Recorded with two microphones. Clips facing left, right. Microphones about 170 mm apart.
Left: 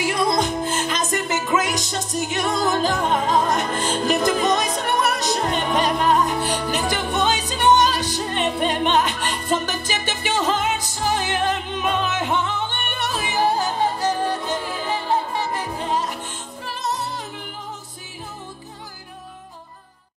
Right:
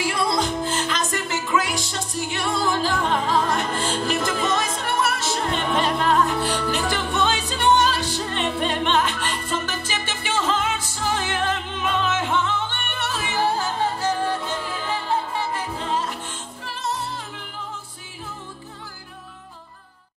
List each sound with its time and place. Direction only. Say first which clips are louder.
0.0 s music: left 2 dB; 20° left (ahead or behind)